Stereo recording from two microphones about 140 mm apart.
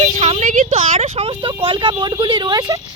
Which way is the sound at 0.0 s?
50° right (ahead or behind).